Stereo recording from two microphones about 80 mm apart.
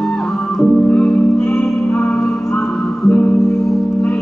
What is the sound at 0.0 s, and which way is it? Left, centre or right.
Music, centre.